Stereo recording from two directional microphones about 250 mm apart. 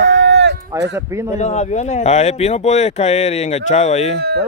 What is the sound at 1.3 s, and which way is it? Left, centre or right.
Speech, left.